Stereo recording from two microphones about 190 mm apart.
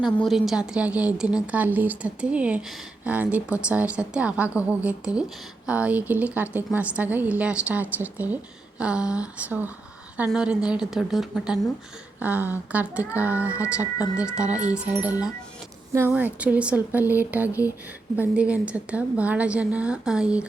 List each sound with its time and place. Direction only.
0.0 s a woman's voice: centre (ahead or behind)